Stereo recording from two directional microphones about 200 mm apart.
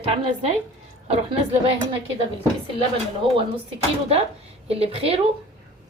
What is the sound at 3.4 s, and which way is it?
A woman's voice, 25° right (ahead or behind).